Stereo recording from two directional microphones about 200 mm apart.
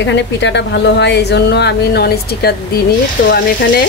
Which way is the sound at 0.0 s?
65° left (ahead or behind).